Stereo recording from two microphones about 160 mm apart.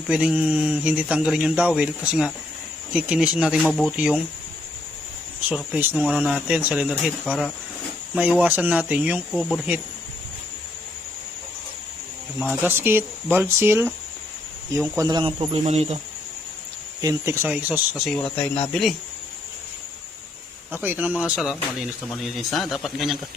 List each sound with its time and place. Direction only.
0.1 s speech: 5° right (ahead or behind)
5.5 s speech: 10° right (ahead or behind)
12.6 s speech: 15° right (ahead or behind)
14.9 s speech: 25° right (ahead or behind); by 16.0 s 45° right (ahead or behind)
17.0 s speech: 20° right (ahead or behind); by 18.9 s centre (ahead or behind)
20.7 s speech: 10° right (ahead or behind)